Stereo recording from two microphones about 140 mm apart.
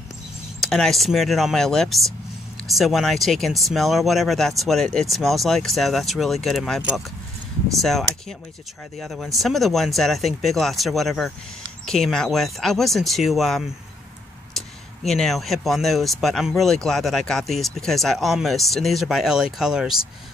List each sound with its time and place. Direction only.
0.6 s speech: centre (ahead or behind)
15.0 s speech: centre (ahead or behind)